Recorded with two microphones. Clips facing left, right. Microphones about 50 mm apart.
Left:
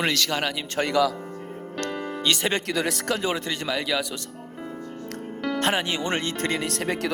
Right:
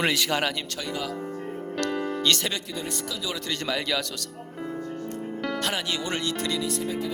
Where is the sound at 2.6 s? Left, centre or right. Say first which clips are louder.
Left 7 dB; left.